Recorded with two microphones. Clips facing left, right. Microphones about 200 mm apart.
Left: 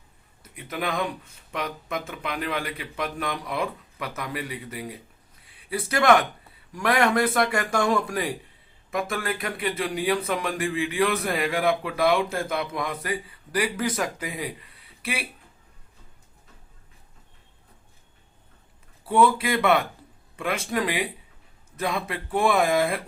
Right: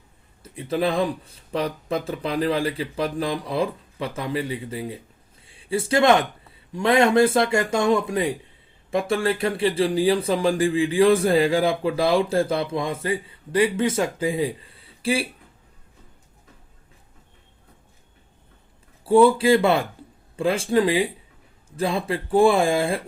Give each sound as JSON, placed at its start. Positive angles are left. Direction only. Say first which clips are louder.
{"t": 0.4, "sound": "speech", "louder": "right 7 dB", "side_deg": -30}
{"t": 19.0, "sound": "speech", "louder": "right 6 dB", "side_deg": -30}